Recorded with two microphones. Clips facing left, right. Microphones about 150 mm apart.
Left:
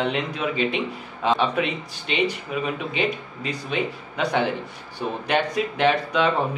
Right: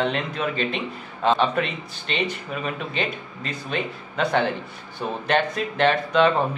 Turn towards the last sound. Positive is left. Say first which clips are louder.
# right 2 dB
turn(degrees=10)  # may be behind; listen again after turning